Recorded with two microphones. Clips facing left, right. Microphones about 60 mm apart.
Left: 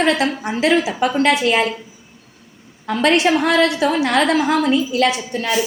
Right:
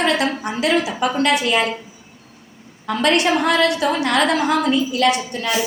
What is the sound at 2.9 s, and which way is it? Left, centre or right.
A woman's voice, left.